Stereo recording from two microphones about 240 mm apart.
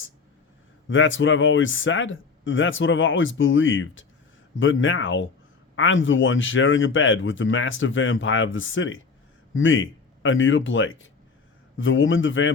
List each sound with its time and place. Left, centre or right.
0.9 s speech: left